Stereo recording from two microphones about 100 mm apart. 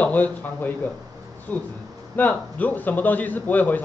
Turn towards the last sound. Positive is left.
turn(degrees=15)  # may be behind; listen again after turning